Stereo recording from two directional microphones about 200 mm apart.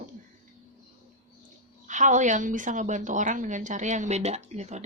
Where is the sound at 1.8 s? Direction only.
40° right (ahead or behind).